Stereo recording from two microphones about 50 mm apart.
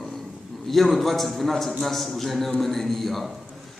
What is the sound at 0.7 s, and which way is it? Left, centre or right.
A man's voice, centre.